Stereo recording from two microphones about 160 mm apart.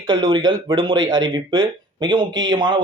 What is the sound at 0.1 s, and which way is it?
Speech, 30° right (ahead or behind).